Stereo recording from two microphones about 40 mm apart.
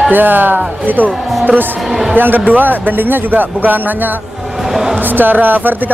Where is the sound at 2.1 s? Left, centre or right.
Right.